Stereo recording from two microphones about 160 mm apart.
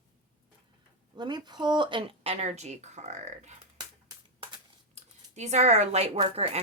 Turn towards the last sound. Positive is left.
turn(degrees=-40)  # may be behind; listen again after turning